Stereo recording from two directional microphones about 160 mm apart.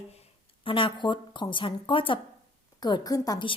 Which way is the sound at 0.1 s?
35° left (ahead or behind).